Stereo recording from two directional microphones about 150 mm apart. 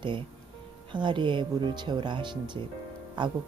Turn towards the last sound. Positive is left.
turn(degrees=-30)  # may be behind; listen again after turning